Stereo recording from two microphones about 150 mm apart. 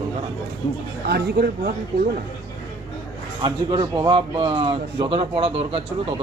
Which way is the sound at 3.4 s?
30° right (ahead or behind).